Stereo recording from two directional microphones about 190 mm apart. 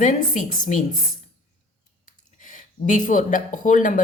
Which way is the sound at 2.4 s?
45° left (ahead or behind).